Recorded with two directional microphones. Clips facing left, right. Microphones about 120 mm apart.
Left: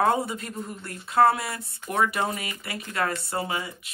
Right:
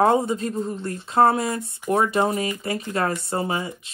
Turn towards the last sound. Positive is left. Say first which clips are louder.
# right 5 dB
turn(degrees=-25)  # may be behind; listen again after turning